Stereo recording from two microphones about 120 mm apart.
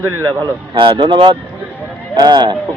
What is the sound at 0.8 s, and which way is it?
Speech, 40° right (ahead or behind).